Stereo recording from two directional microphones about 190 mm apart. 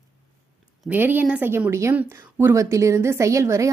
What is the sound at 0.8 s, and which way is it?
Speech, 10° right (ahead or behind).